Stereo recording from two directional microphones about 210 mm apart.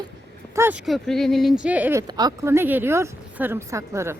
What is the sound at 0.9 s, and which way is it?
Speech, centre (ahead or behind).